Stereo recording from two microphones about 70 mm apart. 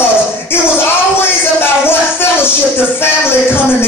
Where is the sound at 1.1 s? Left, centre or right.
Left.